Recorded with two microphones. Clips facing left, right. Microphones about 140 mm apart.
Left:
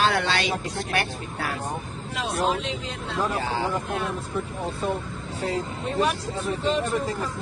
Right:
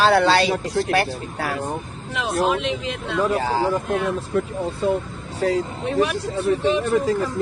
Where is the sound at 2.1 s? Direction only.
80° right.